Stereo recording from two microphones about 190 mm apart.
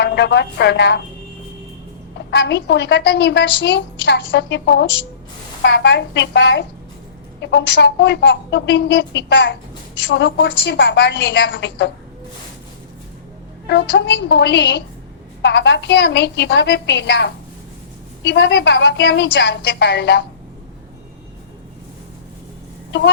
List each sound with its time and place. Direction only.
0.0 s a woman's voice: 65° left (ahead or behind)
2.3 s a woman's voice: 65° left (ahead or behind)
13.7 s a woman's voice: 65° left (ahead or behind)